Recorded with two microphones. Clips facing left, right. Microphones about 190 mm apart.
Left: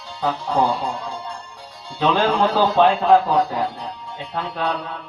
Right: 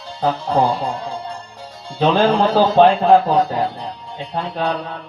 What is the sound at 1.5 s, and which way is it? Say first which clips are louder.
A man's voice: right 5 dB; 40° right (ahead or behind).